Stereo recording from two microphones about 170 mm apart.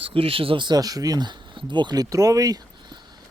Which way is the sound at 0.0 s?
35° right (ahead or behind).